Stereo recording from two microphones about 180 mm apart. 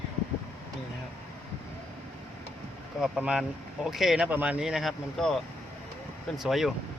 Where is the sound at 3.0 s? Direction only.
5° right (ahead or behind).